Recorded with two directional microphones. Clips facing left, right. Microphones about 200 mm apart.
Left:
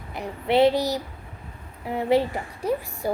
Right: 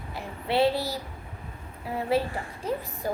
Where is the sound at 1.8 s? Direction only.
20° left (ahead or behind).